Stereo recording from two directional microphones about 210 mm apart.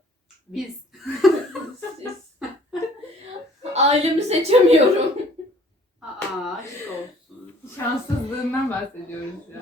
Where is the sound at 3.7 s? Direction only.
30° right (ahead or behind).